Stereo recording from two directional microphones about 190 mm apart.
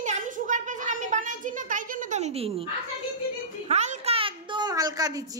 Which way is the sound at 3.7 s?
35° right (ahead or behind).